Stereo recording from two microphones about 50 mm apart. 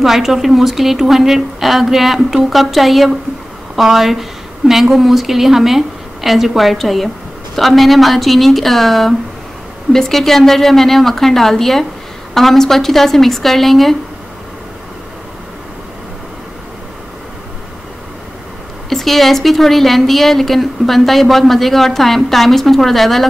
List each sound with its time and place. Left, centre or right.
0.0 s a woman's voice: centre
18.9 s speech: centre